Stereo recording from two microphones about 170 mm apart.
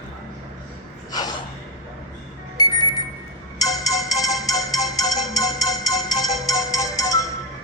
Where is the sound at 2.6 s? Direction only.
25° left (ahead or behind).